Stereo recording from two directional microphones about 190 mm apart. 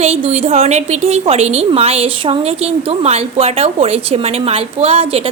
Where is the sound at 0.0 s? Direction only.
35° right (ahead or behind).